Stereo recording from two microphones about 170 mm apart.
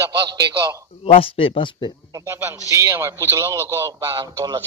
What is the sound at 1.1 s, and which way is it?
Speech, 30° left (ahead or behind).